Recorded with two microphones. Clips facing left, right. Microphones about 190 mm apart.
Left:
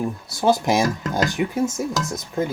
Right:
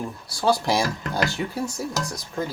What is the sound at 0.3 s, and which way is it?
Speech, 20° left (ahead or behind).